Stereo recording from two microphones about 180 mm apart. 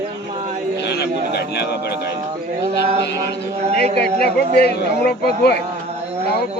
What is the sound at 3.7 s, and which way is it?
Speech, 60° left (ahead or behind).